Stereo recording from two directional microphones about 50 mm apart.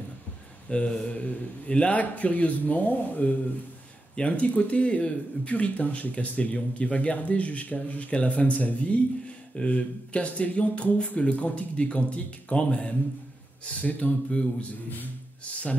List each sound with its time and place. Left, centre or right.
0.7 s speech: centre